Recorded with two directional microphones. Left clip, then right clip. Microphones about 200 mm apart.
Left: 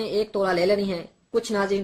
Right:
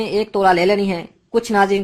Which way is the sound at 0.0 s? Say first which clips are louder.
Right 8 dB; 35° right (ahead or behind).